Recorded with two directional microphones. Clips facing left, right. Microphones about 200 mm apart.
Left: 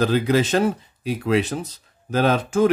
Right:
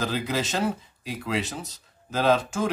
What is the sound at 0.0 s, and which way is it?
Speech, 60° left (ahead or behind).